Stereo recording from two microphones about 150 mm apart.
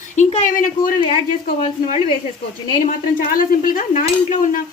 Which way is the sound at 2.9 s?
70° left (ahead or behind).